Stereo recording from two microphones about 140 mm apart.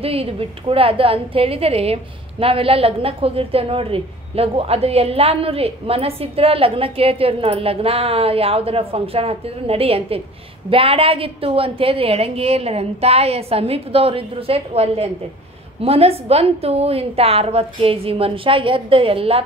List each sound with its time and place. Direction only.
0.0 s a woman's voice: 45° right (ahead or behind)